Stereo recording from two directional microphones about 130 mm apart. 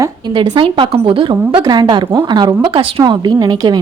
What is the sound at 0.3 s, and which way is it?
A woman's voice, 35° right (ahead or behind).